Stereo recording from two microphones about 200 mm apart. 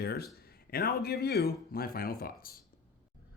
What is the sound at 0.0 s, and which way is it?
Speech, 50° left (ahead or behind).